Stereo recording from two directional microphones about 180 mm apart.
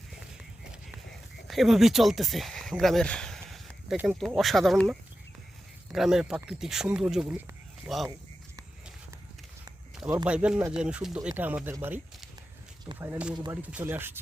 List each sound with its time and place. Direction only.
1.5 s speech: centre (ahead or behind)
10.2 s speech: 5° right (ahead or behind)
13.3 s speech: 20° right (ahead or behind)
13.6 s speech: 10° right (ahead or behind)